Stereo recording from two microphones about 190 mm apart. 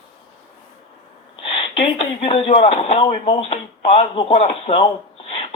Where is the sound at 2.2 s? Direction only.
30° left (ahead or behind).